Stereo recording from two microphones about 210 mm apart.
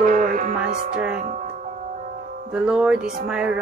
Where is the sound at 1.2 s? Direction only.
35° right (ahead or behind).